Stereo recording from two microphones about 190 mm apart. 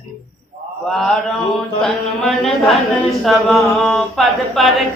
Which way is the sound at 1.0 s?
5° left (ahead or behind).